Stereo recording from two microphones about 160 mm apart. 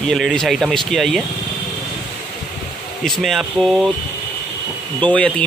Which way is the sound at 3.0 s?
Centre (ahead or behind).